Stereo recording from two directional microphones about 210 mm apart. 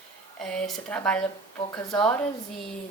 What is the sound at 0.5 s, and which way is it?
Speech, 5° left (ahead or behind).